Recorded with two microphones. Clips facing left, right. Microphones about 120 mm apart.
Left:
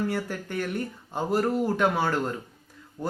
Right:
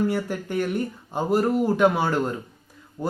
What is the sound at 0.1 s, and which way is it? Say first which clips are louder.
Speech: right 4 dB; 15° right (ahead or behind).